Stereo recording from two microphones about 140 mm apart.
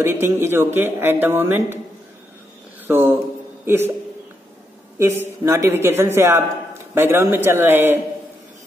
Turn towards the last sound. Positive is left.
turn(degrees=-15)  # may be behind; listen again after turning